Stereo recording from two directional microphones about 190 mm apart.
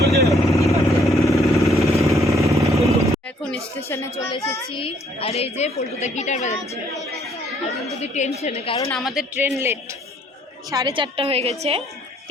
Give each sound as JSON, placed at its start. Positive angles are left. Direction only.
{"t": 0.2, "sound": "vehicle", "side_deg": 15}
{"t": 1.8, "sound": "vehicle", "side_deg": 0}
{"t": 2.2, "sound": "vehicle", "side_deg": -15}
{"t": 3.8, "sound": "speech", "side_deg": 15}
{"t": 4.7, "sound": "a woman's voice", "side_deg": 30}
{"t": 8.0, "sound": "a woman's voice", "side_deg": 40}
{"t": 8.9, "sound": "a woman's voice", "side_deg": 0}